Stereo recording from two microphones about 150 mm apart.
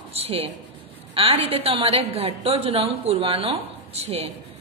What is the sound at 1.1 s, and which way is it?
A woman's voice, 40° right (ahead or behind).